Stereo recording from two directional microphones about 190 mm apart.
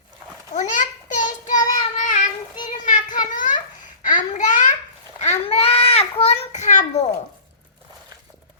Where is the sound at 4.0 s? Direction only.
40° left (ahead or behind).